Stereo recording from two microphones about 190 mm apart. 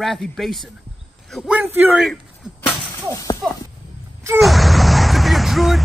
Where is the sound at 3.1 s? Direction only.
20° left (ahead or behind).